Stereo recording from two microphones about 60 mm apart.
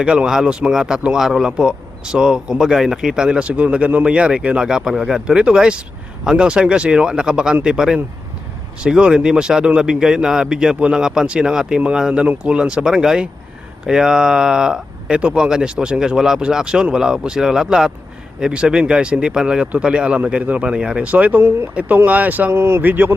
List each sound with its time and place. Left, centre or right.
0.0 s a man's voice: centre
21.0 s speech: right
22.5 s speech: right
22.8 s speech: right